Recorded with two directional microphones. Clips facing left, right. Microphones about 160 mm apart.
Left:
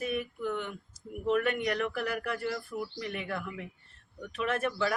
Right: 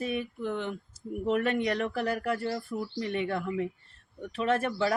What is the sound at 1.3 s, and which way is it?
A man's voice, 30° right (ahead or behind).